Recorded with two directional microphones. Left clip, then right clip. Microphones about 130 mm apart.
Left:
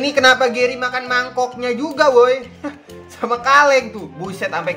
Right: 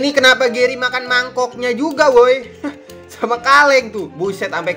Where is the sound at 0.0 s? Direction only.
35° right (ahead or behind).